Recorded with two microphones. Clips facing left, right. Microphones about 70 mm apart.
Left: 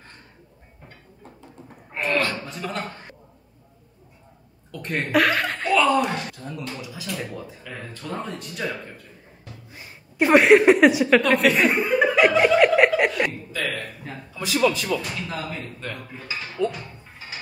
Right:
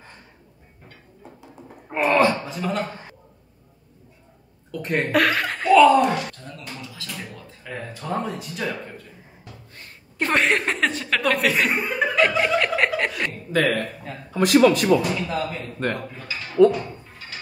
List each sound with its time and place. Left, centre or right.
2.1 s a sound: centre
2.5 s a man's voice: centre
4.6 s a woman's voice: centre
6.3 s speech: centre
7.6 s speech: centre
8.1 s a woman's voice: centre
11.2 s chuckle: centre
13.5 s a man's voice: right
15.1 s a woman's voice: centre
16.6 s speech: right